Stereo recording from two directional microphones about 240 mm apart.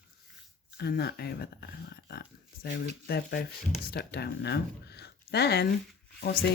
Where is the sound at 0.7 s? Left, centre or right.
Left.